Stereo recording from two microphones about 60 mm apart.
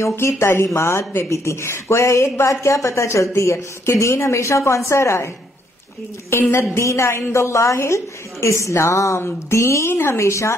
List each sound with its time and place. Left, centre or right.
0.3 s speech: left
6.3 s a woman's voice: left